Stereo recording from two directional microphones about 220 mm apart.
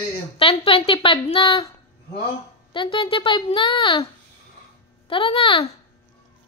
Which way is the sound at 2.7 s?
25° left (ahead or behind).